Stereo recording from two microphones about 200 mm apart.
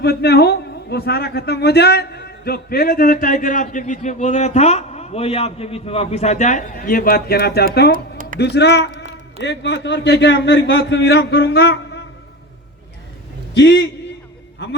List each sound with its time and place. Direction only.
0.0 s a man's voice: 55° left (ahead or behind)
13.5 s a man's voice: 60° left (ahead or behind)